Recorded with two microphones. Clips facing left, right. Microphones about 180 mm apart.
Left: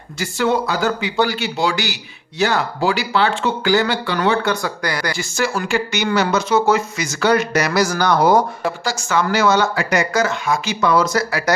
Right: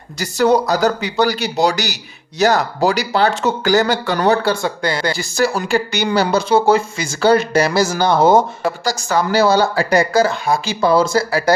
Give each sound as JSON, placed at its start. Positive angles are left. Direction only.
{"t": 0.2, "sound": "speech", "side_deg": -40}
{"t": 8.6, "sound": "speech", "side_deg": -40}